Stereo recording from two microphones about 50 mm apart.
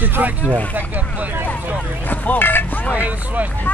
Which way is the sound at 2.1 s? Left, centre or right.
Left.